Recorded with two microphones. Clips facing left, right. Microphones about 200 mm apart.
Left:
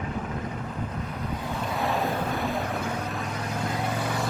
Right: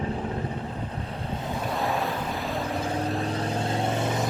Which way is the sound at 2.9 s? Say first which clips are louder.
Right 4 dB; 30° right (ahead or behind).